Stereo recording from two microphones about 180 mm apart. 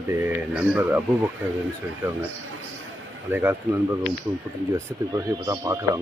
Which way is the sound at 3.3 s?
10° right (ahead or behind).